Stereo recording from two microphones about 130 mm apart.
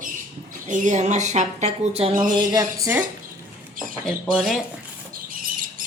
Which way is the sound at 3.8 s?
90° right.